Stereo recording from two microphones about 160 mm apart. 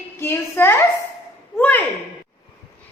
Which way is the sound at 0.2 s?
15° left (ahead or behind).